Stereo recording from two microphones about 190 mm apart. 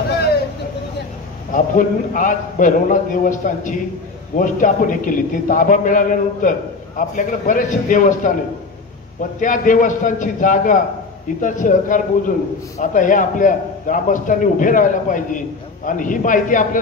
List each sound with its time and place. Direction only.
1.5 s a man's voice: 45° left (ahead or behind)
9.4 s a man's voice: 45° left (ahead or behind)